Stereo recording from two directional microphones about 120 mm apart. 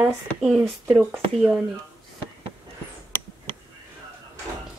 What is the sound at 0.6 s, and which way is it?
Speech, 20° right (ahead or behind).